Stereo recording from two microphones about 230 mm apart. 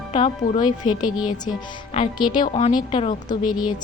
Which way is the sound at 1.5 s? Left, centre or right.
Left.